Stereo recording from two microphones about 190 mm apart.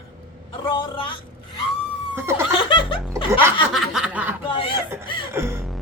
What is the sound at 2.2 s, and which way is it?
Speech, 10° right (ahead or behind).